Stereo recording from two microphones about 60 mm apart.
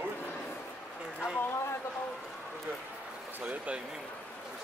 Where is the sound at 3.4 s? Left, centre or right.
Centre.